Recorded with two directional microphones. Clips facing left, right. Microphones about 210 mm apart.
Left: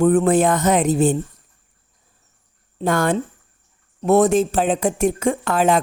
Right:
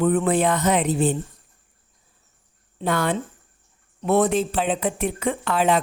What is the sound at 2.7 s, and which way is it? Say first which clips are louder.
A woman's voice: left 4 dB; 45° left (ahead or behind).